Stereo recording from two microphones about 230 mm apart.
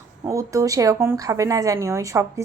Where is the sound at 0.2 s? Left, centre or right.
Centre.